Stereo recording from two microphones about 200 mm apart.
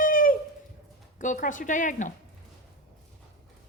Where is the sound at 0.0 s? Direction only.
45° left (ahead or behind).